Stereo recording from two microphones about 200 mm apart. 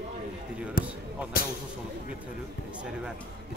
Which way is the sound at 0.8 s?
45° left (ahead or behind).